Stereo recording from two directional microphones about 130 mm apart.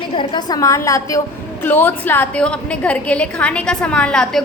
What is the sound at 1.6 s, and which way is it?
A woman's voice, 15° left (ahead or behind).